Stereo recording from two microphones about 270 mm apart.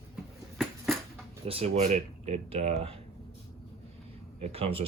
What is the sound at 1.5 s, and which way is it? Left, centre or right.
Speech, right.